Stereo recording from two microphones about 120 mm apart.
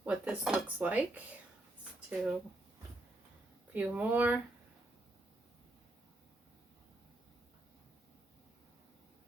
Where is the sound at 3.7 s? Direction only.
15° right (ahead or behind).